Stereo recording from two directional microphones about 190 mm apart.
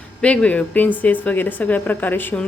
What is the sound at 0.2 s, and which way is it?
Speech, 5° left (ahead or behind).